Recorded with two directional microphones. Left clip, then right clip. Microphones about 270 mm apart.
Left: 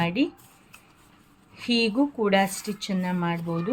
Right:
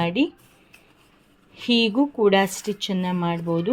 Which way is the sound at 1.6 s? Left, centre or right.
Centre.